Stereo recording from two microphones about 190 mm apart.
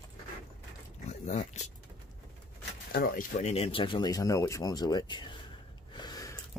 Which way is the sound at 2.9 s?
50° left (ahead or behind).